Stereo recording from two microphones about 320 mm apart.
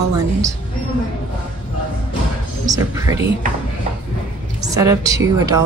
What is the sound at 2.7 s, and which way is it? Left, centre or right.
Speech, centre.